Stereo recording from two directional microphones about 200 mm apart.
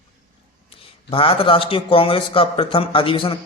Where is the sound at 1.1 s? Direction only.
25° left (ahead or behind).